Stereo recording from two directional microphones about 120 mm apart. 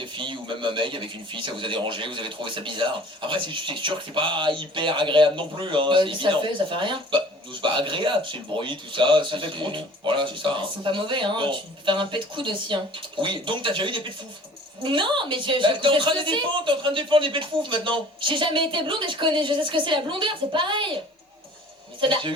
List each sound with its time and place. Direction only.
0.0 s a man's voice: 45° right (ahead or behind)
22.0 s a man's voice: 45° right (ahead or behind)